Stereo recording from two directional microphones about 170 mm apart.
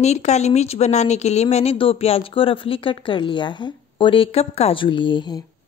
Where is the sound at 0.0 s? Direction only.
40° left (ahead or behind).